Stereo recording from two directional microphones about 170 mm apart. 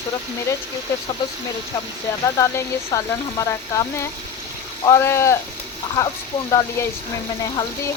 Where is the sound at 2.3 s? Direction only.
15° left (ahead or behind).